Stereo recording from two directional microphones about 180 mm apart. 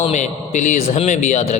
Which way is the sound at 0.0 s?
40° left (ahead or behind).